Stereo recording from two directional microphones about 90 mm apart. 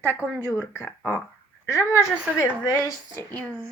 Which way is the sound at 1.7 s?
30° left (ahead or behind).